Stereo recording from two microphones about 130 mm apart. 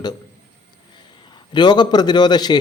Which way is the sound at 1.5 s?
35° left (ahead or behind).